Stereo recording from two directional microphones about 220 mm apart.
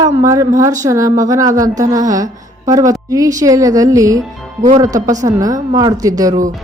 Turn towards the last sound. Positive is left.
turn(degrees=-15)  # may be behind; listen again after turning